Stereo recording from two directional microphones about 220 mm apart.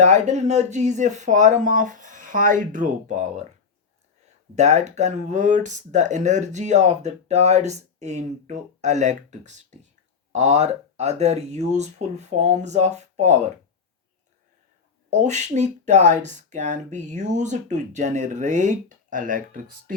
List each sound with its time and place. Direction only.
0.0 s speech: 30° right (ahead or behind)
4.5 s speech: 30° right (ahead or behind)
15.1 s speech: 30° right (ahead or behind)